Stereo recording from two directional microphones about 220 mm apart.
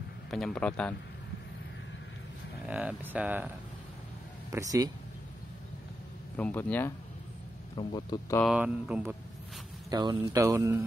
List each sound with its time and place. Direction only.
0.3 s speech: centre (ahead or behind)
2.7 s speech: 5° right (ahead or behind)
6.3 s speech: 5° left (ahead or behind)
7.7 s a man's voice: 20° left (ahead or behind)
8.4 s speech: 5° right (ahead or behind)
9.8 s speech: 20° right (ahead or behind)